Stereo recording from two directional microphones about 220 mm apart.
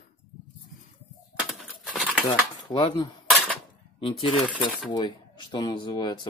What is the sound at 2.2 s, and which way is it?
Speech, 20° left (ahead or behind).